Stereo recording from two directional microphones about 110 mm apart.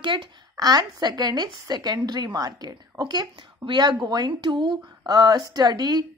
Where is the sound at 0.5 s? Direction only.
35° right (ahead or behind).